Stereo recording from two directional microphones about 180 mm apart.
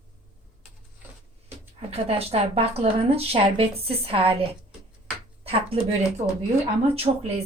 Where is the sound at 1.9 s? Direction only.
35° right (ahead or behind).